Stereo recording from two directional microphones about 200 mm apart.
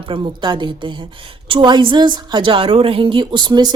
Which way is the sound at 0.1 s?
25° right (ahead or behind).